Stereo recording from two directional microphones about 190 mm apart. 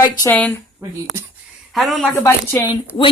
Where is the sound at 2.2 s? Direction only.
15° left (ahead or behind).